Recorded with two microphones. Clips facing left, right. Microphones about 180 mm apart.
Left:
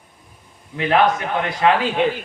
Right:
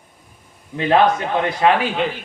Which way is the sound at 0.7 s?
30° right (ahead or behind).